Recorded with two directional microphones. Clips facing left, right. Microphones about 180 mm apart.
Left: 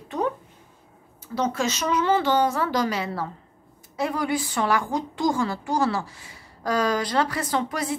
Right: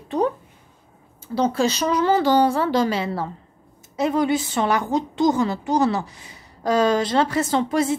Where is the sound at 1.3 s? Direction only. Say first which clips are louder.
Right 5 dB; 30° right (ahead or behind).